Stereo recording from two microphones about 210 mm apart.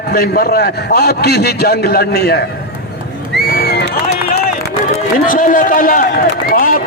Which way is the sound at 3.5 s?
45° left (ahead or behind).